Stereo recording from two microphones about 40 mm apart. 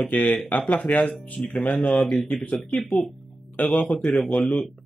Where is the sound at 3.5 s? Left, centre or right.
Left.